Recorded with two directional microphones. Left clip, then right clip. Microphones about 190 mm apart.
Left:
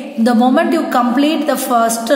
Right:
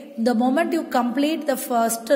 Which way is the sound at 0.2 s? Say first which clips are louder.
Left 8 dB; 35° right (ahead or behind).